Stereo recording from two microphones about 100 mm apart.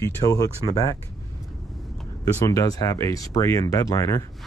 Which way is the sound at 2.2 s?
35° left (ahead or behind).